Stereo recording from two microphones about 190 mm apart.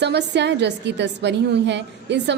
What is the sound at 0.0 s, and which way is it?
A woman's voice, 65° right (ahead or behind).